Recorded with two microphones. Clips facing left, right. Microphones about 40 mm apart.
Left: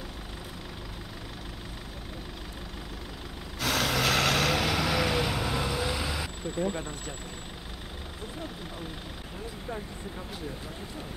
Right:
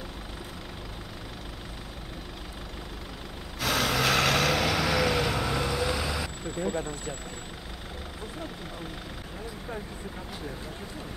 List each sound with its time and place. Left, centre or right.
3.5 s vehicle: centre